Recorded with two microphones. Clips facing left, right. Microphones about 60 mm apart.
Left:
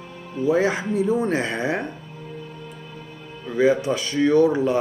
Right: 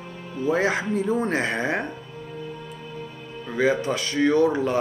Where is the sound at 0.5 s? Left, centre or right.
Centre.